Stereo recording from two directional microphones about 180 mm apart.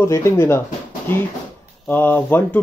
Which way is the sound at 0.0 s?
15° left (ahead or behind).